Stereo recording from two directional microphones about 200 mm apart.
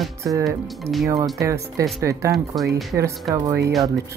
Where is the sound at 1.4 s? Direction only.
15° right (ahead or behind).